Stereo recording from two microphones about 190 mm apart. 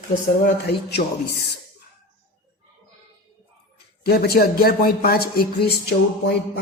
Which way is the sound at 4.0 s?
55° left (ahead or behind).